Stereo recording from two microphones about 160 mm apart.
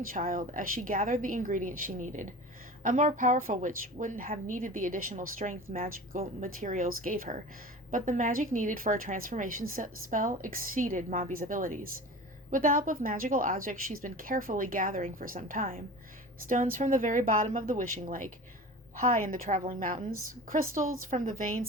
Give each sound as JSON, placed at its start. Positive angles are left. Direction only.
{"t": 0.1, "sound": "a woman's voice", "side_deg": -60}